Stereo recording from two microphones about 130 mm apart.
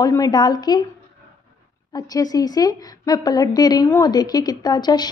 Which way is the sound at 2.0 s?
30° left (ahead or behind).